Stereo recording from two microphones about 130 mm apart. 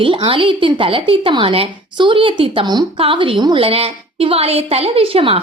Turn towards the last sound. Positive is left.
turn(degrees=-45)  # may be behind; listen again after turning